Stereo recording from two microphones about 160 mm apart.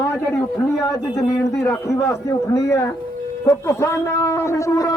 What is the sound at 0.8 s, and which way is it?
Speech, 20° left (ahead or behind).